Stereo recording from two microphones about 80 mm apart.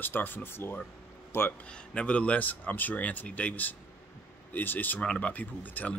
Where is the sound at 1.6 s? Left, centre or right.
Centre.